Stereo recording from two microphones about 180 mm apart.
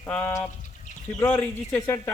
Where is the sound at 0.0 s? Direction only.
10° left (ahead or behind).